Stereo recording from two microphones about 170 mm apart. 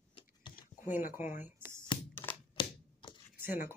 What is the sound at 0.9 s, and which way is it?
Speech, 50° left (ahead or behind).